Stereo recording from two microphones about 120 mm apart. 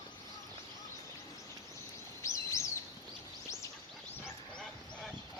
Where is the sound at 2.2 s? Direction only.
25° left (ahead or behind).